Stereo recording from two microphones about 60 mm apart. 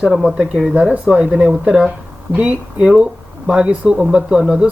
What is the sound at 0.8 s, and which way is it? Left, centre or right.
Speech, right.